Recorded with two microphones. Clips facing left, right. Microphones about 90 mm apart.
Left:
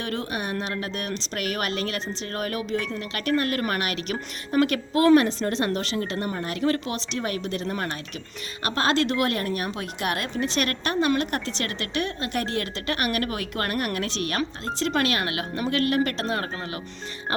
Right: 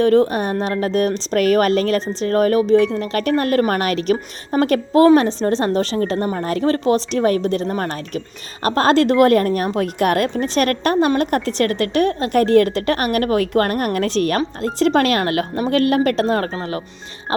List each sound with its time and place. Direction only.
0.0 s a woman's voice: 35° right (ahead or behind)